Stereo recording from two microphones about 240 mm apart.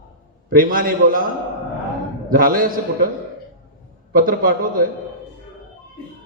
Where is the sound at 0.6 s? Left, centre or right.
Right.